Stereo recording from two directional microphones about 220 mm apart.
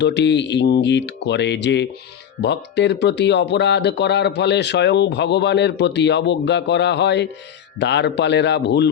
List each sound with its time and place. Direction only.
0.0 s speech: 50° left (ahead or behind)